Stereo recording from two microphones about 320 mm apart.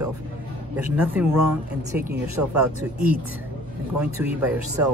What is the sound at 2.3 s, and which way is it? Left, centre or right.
Speech, right.